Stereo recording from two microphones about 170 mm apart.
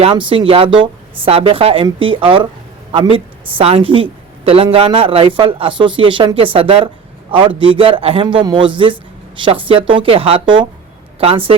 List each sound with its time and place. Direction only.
0.0 s a man's voice: 30° right (ahead or behind)